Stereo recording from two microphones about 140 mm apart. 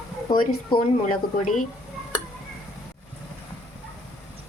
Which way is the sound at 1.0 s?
60° left (ahead or behind).